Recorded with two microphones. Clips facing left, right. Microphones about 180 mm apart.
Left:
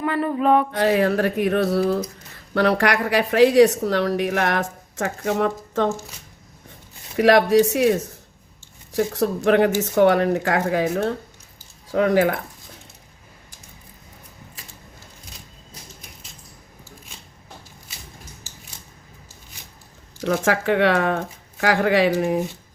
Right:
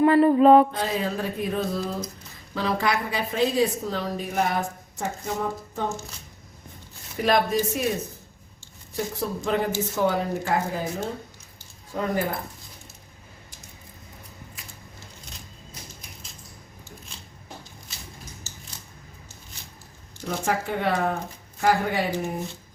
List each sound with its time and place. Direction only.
0.0 s mantra: 30° right (ahead or behind)
0.8 s speech: 70° left (ahead or behind)
7.2 s speech: 75° left (ahead or behind)
20.2 s speech: 90° left